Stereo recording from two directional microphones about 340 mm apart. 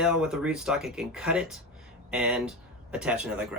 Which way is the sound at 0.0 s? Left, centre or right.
Centre.